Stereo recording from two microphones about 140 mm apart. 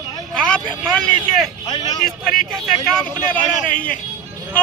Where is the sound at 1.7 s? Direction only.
30° left (ahead or behind).